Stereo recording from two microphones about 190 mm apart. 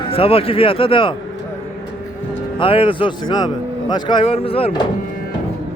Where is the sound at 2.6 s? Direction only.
30° left (ahead or behind).